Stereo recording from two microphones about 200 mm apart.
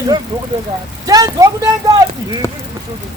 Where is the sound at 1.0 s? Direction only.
20° right (ahead or behind).